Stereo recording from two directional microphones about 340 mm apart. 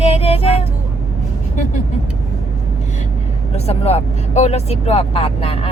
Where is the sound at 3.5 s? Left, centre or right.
Centre.